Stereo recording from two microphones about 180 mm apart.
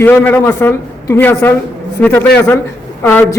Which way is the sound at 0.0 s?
10° left (ahead or behind).